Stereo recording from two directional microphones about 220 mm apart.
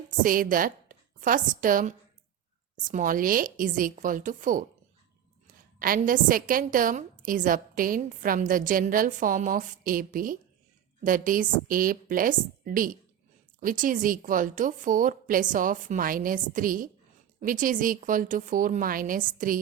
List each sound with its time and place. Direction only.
0.2 s a woman's voice: 40° right (ahead or behind)
5.8 s a woman's voice: 40° right (ahead or behind)